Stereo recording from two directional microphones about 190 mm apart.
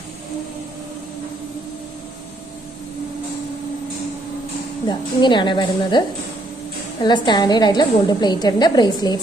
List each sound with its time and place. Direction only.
4.9 s a woman's voice: 25° left (ahead or behind)
7.0 s a woman's voice: 20° left (ahead or behind)